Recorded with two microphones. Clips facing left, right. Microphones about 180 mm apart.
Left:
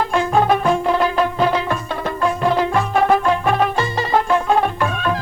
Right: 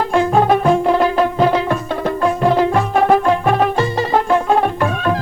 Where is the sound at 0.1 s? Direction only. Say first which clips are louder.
Right 4 dB; 40° right (ahead or behind).